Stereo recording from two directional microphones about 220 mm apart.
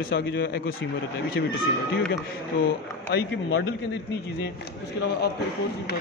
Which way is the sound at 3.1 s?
60° left (ahead or behind).